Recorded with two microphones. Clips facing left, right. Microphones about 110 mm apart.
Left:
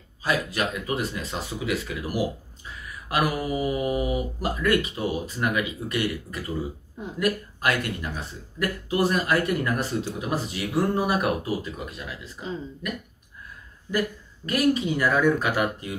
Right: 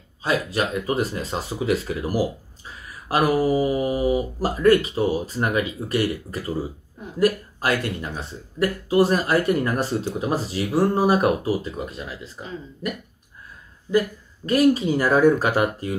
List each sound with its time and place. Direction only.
0.2 s speech: 30° right (ahead or behind)